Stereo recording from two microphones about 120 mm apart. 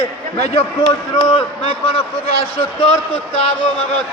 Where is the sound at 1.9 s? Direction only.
45° left (ahead or behind).